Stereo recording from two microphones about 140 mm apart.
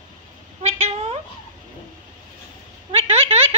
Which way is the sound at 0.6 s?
45° right (ahead or behind).